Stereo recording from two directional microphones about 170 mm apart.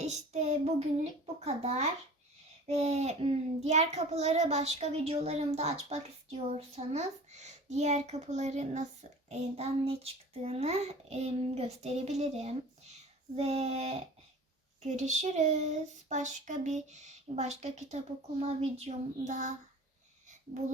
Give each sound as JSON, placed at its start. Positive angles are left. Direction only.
{"t": 0.0, "sound": "child singing", "side_deg": -40}
{"t": 1.5, "sound": "speech", "side_deg": -40}